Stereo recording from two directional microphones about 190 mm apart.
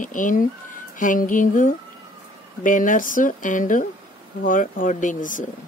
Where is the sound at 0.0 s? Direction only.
45° left (ahead or behind).